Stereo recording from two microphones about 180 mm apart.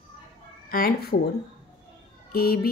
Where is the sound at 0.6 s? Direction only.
55° left (ahead or behind).